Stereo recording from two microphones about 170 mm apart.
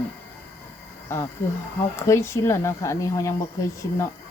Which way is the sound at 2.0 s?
15° left (ahead or behind).